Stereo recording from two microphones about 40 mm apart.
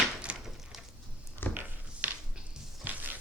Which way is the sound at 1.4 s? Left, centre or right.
Left.